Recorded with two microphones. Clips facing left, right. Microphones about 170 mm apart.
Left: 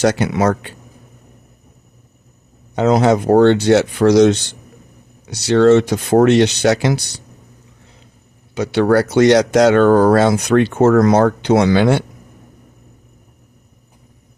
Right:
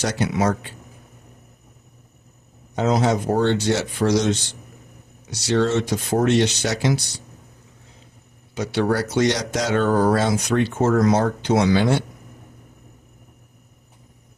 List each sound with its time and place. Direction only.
0.0 s speech: 65° left (ahead or behind)
2.7 s speech: 65° left (ahead or behind)
8.5 s speech: 70° left (ahead or behind)